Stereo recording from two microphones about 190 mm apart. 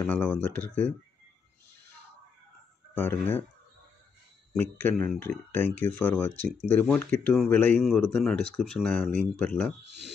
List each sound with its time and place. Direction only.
0.0 s speech: 10° left (ahead or behind)
2.9 s speech: 10° left (ahead or behind)
4.6 s speech: 10° left (ahead or behind)
9.8 s speech: 65° right (ahead or behind)